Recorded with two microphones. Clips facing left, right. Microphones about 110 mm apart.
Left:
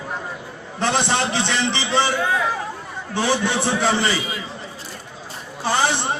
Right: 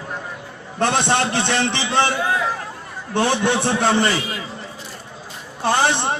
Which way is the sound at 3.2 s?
55° right (ahead or behind).